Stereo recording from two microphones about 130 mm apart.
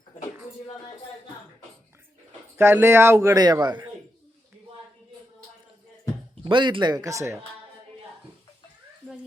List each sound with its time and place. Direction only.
2.6 s a man's voice: 20° right (ahead or behind); by 3.8 s 35° right (ahead or behind)
6.4 s speech: 40° right (ahead or behind)